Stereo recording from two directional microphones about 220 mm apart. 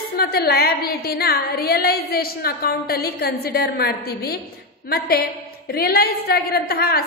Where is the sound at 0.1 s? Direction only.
45° left (ahead or behind).